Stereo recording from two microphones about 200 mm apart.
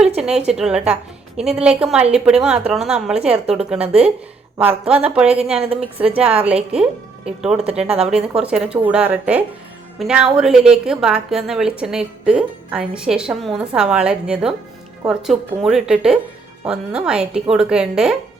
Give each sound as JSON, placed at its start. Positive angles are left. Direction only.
{"t": 0.2, "sound": "a woman's voice", "side_deg": -5}
{"t": 5.5, "sound": "a woman's voice", "side_deg": -30}
{"t": 6.1, "sound": "a woman's voice", "side_deg": -5}